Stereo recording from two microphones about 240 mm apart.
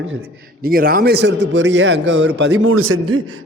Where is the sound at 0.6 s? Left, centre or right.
Right.